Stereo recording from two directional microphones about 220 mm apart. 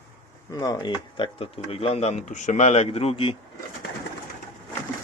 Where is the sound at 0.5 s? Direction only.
15° left (ahead or behind).